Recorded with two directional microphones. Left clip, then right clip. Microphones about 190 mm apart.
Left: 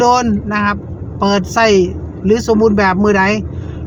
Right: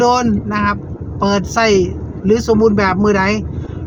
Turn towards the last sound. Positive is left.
turn(degrees=15)  # may be behind; listen again after turning